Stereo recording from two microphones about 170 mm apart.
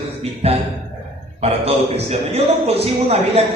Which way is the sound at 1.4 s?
35° right (ahead or behind).